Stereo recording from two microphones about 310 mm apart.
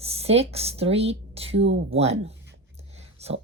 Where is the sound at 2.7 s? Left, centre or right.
Centre.